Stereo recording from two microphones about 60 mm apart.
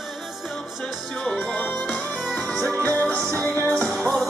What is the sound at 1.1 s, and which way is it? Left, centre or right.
Music, centre.